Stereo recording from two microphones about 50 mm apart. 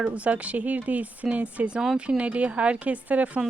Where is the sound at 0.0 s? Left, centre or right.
Right.